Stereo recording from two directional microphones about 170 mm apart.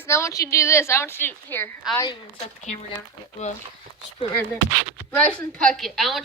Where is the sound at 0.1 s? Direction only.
15° left (ahead or behind).